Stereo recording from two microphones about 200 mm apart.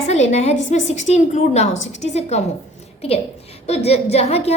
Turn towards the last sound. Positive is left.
turn(degrees=30)  # may be behind; listen again after turning